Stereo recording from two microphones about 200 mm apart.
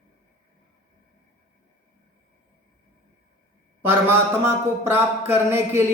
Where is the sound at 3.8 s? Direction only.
10° right (ahead or behind).